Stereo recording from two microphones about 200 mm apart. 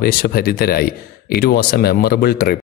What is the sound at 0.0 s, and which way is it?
Speech, 50° left (ahead or behind).